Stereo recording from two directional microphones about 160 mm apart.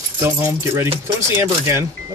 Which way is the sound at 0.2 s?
15° right (ahead or behind).